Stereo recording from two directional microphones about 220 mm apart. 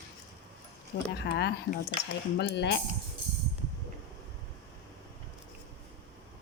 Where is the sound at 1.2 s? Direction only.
50° left (ahead or behind).